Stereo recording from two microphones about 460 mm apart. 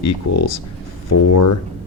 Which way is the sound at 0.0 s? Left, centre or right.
Left.